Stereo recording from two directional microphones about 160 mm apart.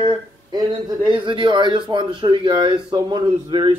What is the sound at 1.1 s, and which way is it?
Speech, 30° right (ahead or behind).